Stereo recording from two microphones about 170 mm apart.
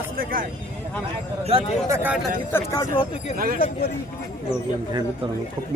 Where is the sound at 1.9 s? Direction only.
10° right (ahead or behind).